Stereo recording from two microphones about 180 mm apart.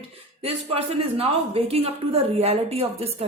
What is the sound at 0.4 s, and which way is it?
A woman's voice, 35° right (ahead or behind).